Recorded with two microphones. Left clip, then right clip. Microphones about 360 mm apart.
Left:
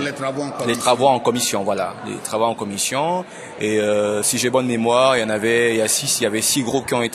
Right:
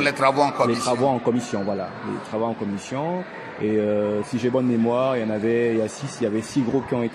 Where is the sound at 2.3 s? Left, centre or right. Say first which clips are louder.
Left 7 dB; left.